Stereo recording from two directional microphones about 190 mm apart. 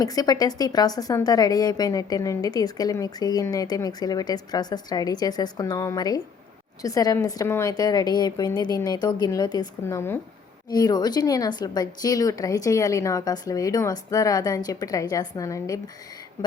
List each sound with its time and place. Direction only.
0.0 s a woman's voice: 20° left (ahead or behind)